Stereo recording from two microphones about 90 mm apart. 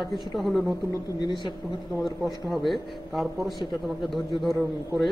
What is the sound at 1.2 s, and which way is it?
Speech, 60° left (ahead or behind).